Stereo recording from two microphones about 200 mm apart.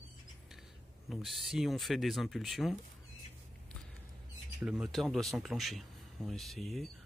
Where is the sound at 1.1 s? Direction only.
Centre (ahead or behind).